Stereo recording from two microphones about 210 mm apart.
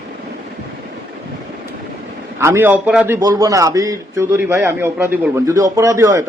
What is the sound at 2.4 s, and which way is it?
A man's voice, 10° right (ahead or behind).